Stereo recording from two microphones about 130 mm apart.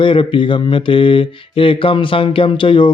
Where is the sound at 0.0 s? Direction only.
40° left (ahead or behind).